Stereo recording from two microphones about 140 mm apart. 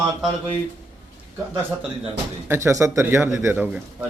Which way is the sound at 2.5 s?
20° right (ahead or behind).